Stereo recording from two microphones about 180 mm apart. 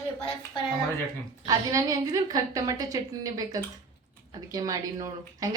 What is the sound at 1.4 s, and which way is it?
A woman's voice, 20° right (ahead or behind).